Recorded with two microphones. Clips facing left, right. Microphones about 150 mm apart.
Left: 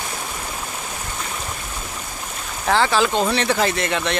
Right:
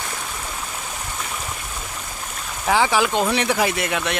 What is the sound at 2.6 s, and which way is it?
Speech, 10° right (ahead or behind).